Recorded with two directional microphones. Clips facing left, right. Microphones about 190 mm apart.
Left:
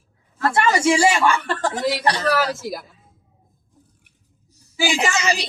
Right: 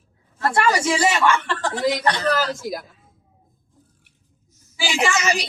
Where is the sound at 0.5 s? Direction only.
25° left (ahead or behind).